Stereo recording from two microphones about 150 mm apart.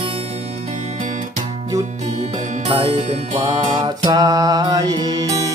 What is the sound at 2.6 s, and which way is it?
Music, 40° right (ahead or behind).